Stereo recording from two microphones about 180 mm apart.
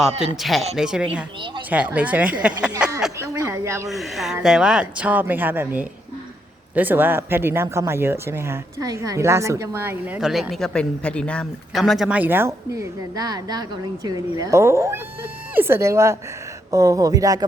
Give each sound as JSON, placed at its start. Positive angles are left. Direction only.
{"t": 0.3, "sound": "speech", "side_deg": 0}
{"t": 3.2, "sound": "a sound", "side_deg": -15}
{"t": 3.8, "sound": "speech", "side_deg": 0}